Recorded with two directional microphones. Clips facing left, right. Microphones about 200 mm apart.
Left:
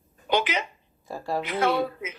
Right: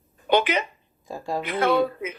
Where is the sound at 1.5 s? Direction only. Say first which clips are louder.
Right 4 dB; 55° right (ahead or behind).